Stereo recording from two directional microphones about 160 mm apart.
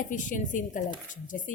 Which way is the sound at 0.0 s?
55° left (ahead or behind).